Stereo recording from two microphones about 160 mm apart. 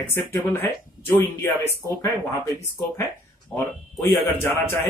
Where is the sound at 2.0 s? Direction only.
20° left (ahead or behind).